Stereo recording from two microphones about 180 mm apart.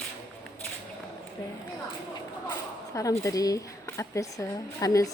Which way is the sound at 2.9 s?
20° left (ahead or behind).